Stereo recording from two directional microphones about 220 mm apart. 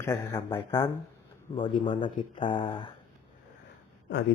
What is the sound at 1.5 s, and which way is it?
Speech, 25° left (ahead or behind).